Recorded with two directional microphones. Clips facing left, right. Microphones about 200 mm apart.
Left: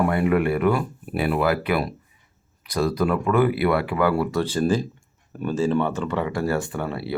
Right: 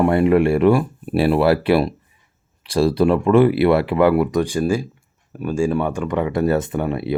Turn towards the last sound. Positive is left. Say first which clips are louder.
# right 6 dB
turn(degrees=-20)  # may be behind; listen again after turning